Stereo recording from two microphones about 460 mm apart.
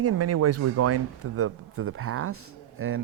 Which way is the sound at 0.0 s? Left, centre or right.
Right.